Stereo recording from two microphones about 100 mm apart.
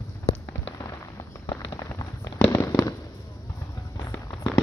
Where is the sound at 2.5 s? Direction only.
30° left (ahead or behind).